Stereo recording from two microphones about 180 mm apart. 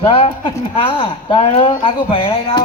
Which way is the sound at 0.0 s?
30° left (ahead or behind).